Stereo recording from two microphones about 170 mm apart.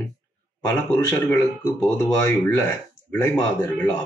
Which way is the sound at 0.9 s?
15° left (ahead or behind).